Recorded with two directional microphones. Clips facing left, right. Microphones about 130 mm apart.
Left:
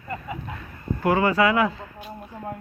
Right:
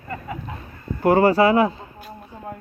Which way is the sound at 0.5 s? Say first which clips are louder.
Left 1 dB; 30° right (ahead or behind).